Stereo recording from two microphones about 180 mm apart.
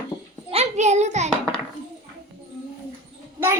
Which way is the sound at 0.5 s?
35° right (ahead or behind).